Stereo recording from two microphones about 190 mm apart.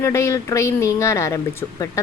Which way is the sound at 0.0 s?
15° left (ahead or behind).